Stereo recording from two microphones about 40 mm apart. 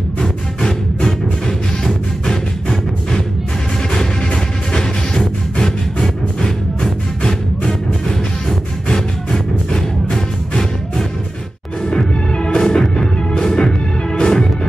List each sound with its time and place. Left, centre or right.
0.2 s music: centre
8.8 s music: centre